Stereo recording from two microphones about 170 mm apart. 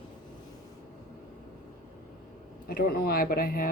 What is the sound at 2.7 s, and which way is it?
Speech, 60° left (ahead or behind).